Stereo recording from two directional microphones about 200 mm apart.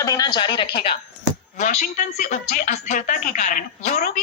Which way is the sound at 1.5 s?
35° left (ahead or behind).